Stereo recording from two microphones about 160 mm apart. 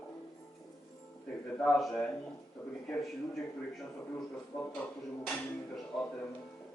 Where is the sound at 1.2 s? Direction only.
5° left (ahead or behind).